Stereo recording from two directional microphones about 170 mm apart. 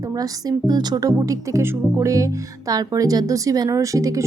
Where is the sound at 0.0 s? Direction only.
20° right (ahead or behind).